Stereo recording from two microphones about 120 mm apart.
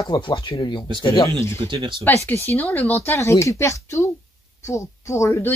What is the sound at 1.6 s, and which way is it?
Speech, 40° right (ahead or behind).